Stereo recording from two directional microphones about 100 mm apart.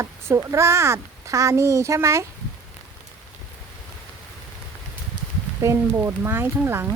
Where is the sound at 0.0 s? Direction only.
30° right (ahead or behind).